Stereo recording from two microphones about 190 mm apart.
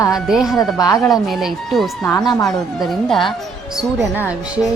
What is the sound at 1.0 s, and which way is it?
Speech, centre (ahead or behind).